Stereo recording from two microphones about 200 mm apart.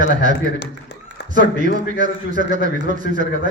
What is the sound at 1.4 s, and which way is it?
A man's voice, 40° right (ahead or behind).